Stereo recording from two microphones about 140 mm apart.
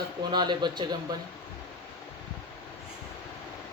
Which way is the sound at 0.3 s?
30° right (ahead or behind).